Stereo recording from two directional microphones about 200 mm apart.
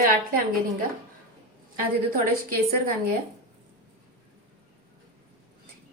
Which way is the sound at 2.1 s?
45° right (ahead or behind).